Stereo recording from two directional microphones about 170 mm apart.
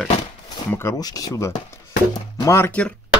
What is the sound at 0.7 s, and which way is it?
Speech, 15° left (ahead or behind).